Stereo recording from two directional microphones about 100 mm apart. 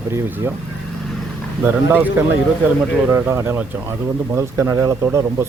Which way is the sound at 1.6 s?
20° right (ahead or behind).